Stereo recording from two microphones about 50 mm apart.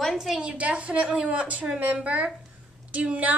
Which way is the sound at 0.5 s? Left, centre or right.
Right.